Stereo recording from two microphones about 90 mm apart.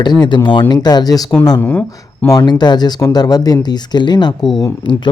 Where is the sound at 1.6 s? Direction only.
15° left (ahead or behind).